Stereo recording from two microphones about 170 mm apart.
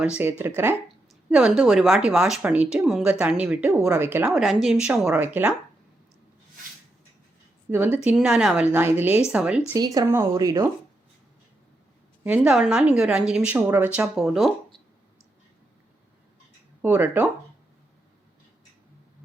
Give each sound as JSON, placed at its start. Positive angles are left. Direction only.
{"t": 0.0, "sound": "speech", "side_deg": -10}
{"t": 1.3, "sound": "speech", "side_deg": -5}
{"t": 4.3, "sound": "speech", "side_deg": 0}
{"t": 5.0, "sound": "speech", "side_deg": -10}
{"t": 7.7, "sound": "speech", "side_deg": -10}
{"t": 9.7, "sound": "speech", "side_deg": -20}
{"t": 12.2, "sound": "speech", "side_deg": -10}
{"t": 16.8, "sound": "speech", "side_deg": -10}